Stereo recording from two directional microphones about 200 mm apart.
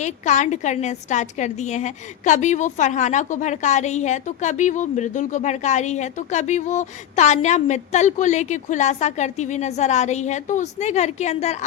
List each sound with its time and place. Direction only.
0.0 s a woman's voice: 35° left (ahead or behind)